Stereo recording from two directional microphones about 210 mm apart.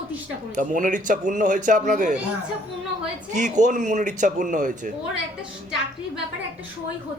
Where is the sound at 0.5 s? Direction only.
35° right (ahead or behind).